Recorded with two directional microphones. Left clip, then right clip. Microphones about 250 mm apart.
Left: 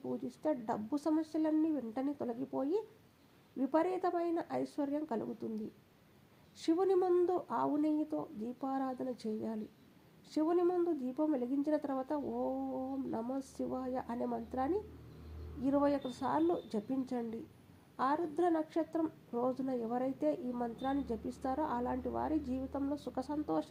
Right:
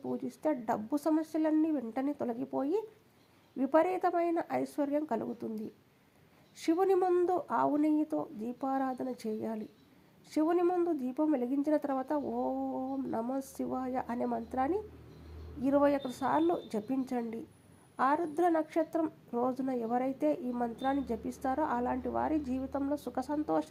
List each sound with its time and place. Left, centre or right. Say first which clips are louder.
0.0 s a woman's voice: right 4 dB; right